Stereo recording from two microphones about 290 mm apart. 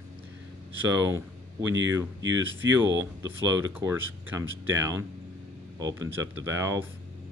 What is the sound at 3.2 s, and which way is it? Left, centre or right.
Speech, centre.